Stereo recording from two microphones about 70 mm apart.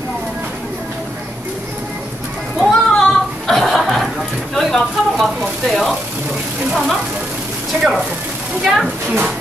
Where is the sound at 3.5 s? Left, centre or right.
Centre.